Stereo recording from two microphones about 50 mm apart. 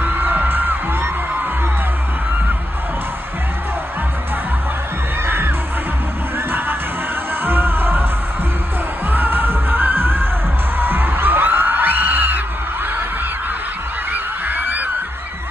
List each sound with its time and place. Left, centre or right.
0.0 s music: right
5.2 s crowd: right
7.4 s music: right
9.1 s music: right
14.1 s goose: right